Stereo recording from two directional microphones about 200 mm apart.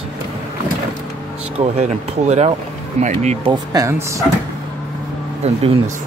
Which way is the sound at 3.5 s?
15° right (ahead or behind).